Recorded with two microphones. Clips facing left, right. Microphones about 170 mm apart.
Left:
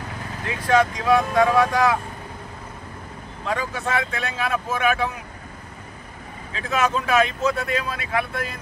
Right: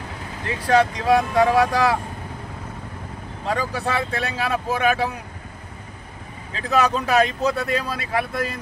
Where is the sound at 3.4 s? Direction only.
35° right (ahead or behind).